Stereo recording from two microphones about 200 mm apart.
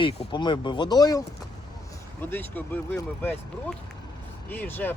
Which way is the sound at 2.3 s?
10° left (ahead or behind).